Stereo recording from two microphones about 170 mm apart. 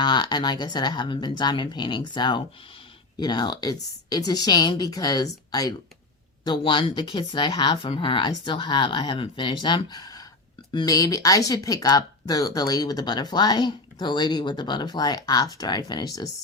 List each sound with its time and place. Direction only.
0.0 s speech: 25° left (ahead or behind)